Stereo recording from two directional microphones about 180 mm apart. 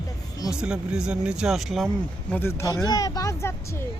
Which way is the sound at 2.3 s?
15° left (ahead or behind).